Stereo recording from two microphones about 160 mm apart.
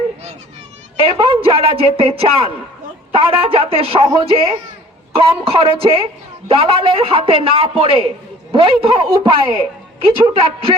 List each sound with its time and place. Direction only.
1.1 s a man's voice: 35° right (ahead or behind)